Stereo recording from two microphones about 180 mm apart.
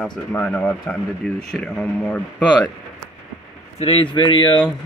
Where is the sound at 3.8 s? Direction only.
30° left (ahead or behind).